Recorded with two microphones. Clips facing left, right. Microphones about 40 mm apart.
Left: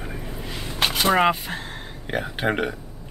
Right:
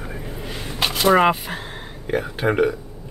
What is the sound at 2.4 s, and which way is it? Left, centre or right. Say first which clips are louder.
Speech: right 5 dB; centre.